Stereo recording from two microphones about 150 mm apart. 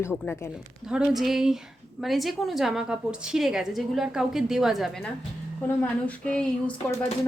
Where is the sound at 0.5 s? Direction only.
5° right (ahead or behind).